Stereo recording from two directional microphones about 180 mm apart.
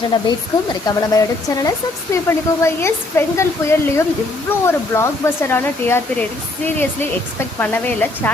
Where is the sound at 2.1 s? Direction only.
15° left (ahead or behind).